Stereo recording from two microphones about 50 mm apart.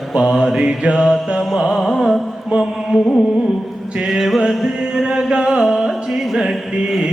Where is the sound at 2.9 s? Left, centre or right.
Centre.